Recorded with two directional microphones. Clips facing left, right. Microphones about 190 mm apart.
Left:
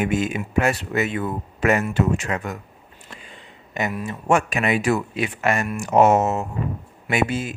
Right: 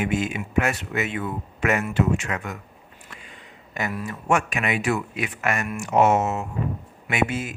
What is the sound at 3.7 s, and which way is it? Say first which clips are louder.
Speech: left 3 dB; 20° left (ahead or behind).